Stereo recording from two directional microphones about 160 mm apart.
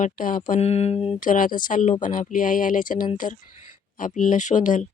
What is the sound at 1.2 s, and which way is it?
Speech, 55° left (ahead or behind).